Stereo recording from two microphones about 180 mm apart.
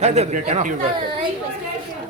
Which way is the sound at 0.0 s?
40° right (ahead or behind).